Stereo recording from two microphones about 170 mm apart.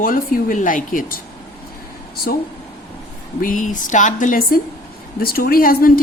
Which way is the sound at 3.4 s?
50° left (ahead or behind).